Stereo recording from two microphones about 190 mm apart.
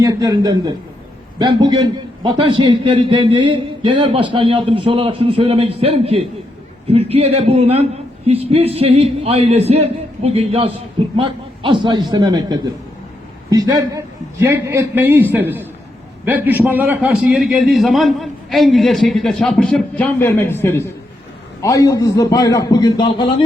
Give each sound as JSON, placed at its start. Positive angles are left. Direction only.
{"t": 0.0, "sound": "a man's voice", "side_deg": -20}